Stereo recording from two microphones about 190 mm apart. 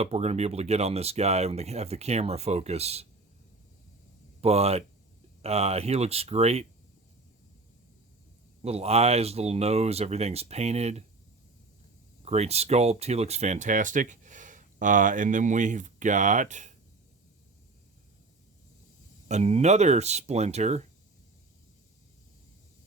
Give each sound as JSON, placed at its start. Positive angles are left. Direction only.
{"t": 0.0, "sound": "speech", "side_deg": -35}
{"t": 4.4, "sound": "speech", "side_deg": -35}
{"t": 8.6, "sound": "speech", "side_deg": -35}
{"t": 12.2, "sound": "speech", "side_deg": -35}
{"t": 19.3, "sound": "speech", "side_deg": -35}